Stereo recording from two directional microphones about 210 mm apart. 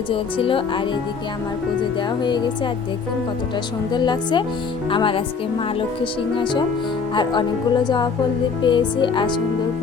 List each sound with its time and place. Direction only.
0.1 s speech: 25° left (ahead or behind)
2.0 s speech: 20° left (ahead or behind)
3.9 s speech: 20° left (ahead or behind)
8.6 s speech: 20° left (ahead or behind)